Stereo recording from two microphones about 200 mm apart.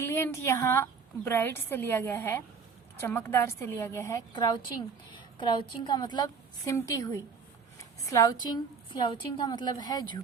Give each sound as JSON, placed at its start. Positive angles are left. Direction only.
{"t": 0.0, "sound": "a woman's voice", "side_deg": 10}